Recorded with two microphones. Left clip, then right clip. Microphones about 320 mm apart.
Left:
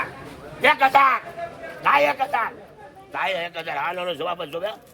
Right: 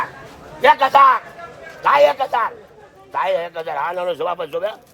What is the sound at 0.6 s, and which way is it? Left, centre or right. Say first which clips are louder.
Speech: right 5 dB; centre.